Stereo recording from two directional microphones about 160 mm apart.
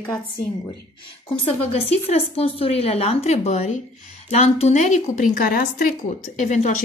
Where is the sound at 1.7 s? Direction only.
40° left (ahead or behind).